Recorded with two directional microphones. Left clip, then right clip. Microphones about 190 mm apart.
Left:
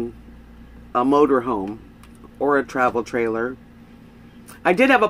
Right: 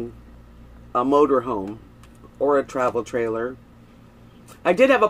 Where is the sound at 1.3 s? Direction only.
15° left (ahead or behind).